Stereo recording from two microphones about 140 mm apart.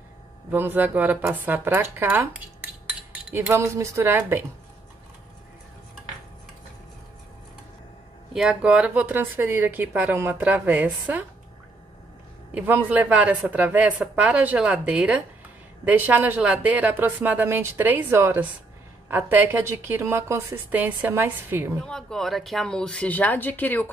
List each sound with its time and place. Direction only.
0.5 s a woman's voice: 15° right (ahead or behind)
8.3 s a woman's voice: 5° right (ahead or behind)
12.5 s a woman's voice: 15° right (ahead or behind)
21.8 s speech: 5° left (ahead or behind)